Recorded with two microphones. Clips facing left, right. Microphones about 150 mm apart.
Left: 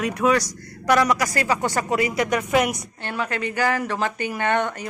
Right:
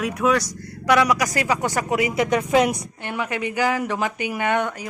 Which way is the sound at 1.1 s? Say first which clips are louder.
Even; 15° right (ahead or behind).